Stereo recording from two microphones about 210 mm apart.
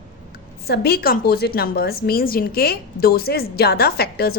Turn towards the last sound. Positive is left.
turn(degrees=50)  # may be behind; listen again after turning